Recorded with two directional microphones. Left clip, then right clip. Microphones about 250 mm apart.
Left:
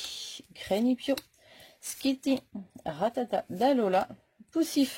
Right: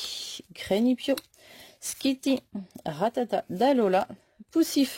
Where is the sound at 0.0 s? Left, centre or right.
Right.